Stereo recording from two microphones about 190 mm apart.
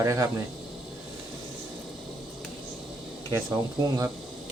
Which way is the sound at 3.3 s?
15° right (ahead or behind).